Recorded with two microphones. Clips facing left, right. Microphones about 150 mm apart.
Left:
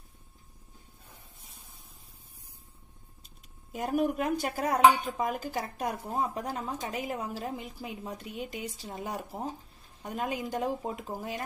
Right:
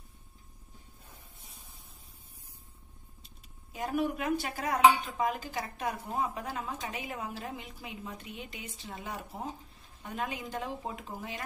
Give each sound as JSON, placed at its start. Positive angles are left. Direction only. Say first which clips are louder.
{"t": 3.7, "sound": "a woman's voice", "louder": "left 3 dB", "side_deg": 45}